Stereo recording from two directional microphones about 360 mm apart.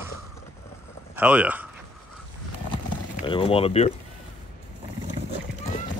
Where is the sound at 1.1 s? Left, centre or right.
Centre.